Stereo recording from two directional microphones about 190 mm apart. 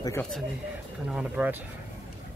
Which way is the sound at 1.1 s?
5° right (ahead or behind).